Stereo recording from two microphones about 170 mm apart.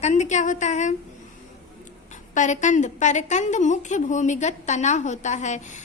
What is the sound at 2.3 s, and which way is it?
A woman's voice, 45° left (ahead or behind).